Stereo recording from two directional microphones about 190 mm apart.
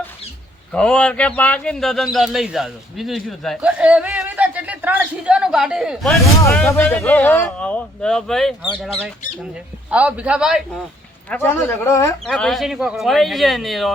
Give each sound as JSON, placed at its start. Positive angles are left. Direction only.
{"t": 0.7, "sound": "a man's voice", "side_deg": 5}
{"t": 11.9, "sound": "speech", "side_deg": 15}
{"t": 12.2, "sound": "speech", "side_deg": 5}